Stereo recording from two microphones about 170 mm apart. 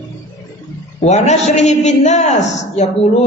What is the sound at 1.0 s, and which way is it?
A man's voice, 45° left (ahead or behind).